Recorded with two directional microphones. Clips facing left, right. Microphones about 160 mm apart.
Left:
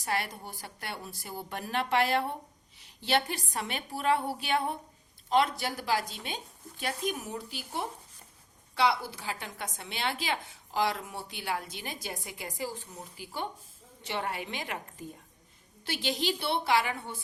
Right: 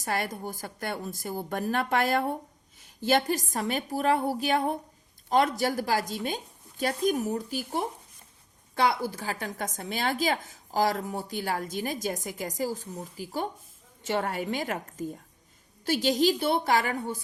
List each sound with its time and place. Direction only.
0.0 s a woman's voice: 45° right (ahead or behind)